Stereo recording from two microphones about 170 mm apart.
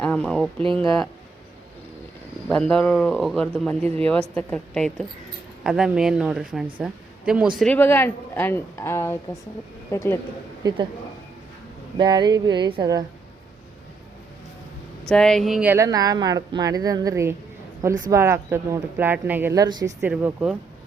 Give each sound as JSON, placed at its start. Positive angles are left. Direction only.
{"t": 0.0, "sound": "speech", "side_deg": 5}
{"t": 0.6, "sound": "a woman's voice", "side_deg": -30}
{"t": 2.5, "sound": "a woman's voice", "side_deg": 5}
{"t": 7.6, "sound": "speech", "side_deg": 10}
{"t": 10.6, "sound": "speech", "side_deg": -25}
{"t": 11.9, "sound": "a woman's voice", "side_deg": -25}
{"t": 15.1, "sound": "speech", "side_deg": 5}
{"t": 15.7, "sound": "a woman's voice", "side_deg": -20}
{"t": 19.6, "sound": "a woman's voice", "side_deg": -25}
{"t": 20.0, "sound": "speech", "side_deg": -10}